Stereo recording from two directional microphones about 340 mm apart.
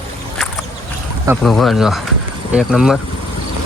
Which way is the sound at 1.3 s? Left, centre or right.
Centre.